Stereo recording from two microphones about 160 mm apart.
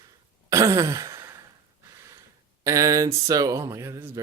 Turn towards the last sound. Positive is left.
turn(degrees=-20)  # may be behind; listen again after turning